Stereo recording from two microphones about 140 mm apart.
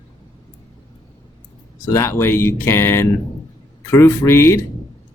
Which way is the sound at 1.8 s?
20° left (ahead or behind).